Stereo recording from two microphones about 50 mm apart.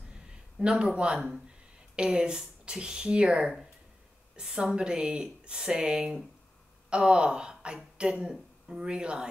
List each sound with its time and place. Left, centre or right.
0.3 s a woman's voice: centre